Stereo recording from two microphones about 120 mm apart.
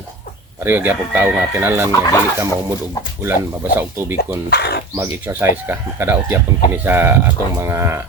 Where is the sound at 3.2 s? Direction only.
15° right (ahead or behind).